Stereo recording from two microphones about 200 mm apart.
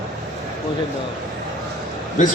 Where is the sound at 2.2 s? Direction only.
40° left (ahead or behind).